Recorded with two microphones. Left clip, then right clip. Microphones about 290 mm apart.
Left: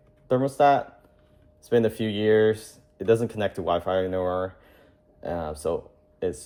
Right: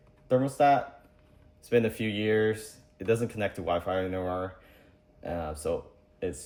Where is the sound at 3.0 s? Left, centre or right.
Centre.